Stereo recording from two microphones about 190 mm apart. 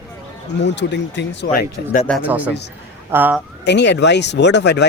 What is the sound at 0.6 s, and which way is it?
Speech, 65° left (ahead or behind).